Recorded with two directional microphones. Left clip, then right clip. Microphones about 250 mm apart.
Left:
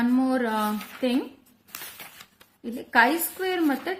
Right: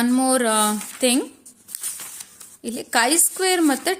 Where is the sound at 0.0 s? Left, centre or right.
Right.